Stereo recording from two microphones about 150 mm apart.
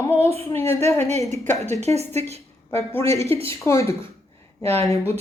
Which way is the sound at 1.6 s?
45° right (ahead or behind).